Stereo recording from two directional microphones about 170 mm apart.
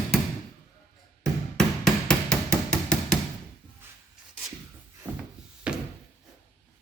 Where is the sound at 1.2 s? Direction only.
Centre (ahead or behind).